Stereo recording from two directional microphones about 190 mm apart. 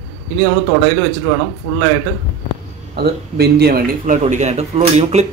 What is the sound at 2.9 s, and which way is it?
A man's voice, 55° right (ahead or behind).